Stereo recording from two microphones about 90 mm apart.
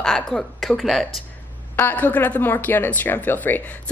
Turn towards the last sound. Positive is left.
turn(degrees=20)  # may be behind; listen again after turning